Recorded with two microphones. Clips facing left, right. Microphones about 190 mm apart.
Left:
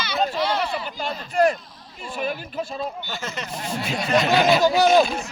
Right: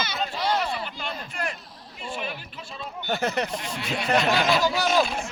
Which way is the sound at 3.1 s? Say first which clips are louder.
Right 6 dB; 60° right (ahead or behind).